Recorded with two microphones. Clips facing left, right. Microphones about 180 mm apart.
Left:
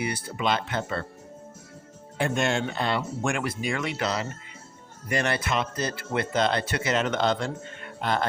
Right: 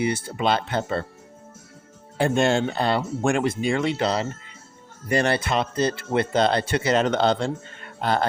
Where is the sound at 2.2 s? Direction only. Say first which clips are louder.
Right 5 dB; 35° right (ahead or behind).